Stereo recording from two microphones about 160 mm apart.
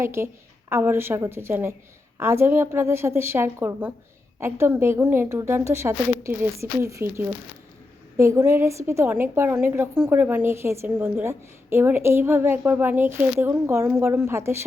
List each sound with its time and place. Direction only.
0.0 s a woman's voice: 15° right (ahead or behind)